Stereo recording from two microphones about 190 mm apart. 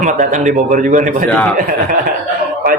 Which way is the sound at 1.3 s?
5° left (ahead or behind).